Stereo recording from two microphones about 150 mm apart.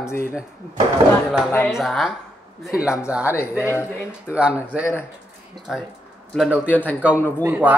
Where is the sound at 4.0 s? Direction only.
5° right (ahead or behind).